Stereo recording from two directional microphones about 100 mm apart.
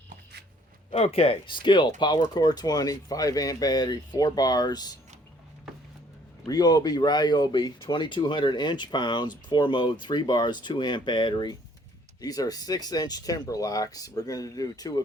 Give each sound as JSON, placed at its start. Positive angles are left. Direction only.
{"t": 0.9, "sound": "speech", "side_deg": 90}
{"t": 6.5, "sound": "speech", "side_deg": 40}